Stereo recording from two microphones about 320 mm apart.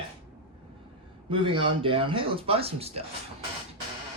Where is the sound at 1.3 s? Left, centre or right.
Centre.